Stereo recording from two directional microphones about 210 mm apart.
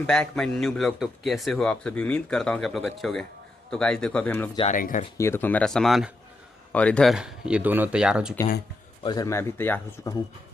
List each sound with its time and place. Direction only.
0.1 s a man's voice: 5° left (ahead or behind)
4.7 s speech: 40° left (ahead or behind)
5.1 s a man's voice: 10° left (ahead or behind); by 8.4 s 5° right (ahead or behind)
9.0 s speech: 15° left (ahead or behind)